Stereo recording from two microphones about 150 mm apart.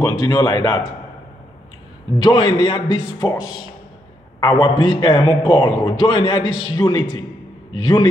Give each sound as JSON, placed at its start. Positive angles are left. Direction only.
{"t": 0.0, "sound": "a man's voice", "side_deg": 25}
{"t": 2.2, "sound": "a man's voice", "side_deg": 35}